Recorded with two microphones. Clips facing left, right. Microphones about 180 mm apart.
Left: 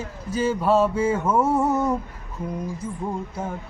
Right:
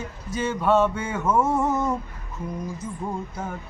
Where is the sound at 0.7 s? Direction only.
30° left (ahead or behind).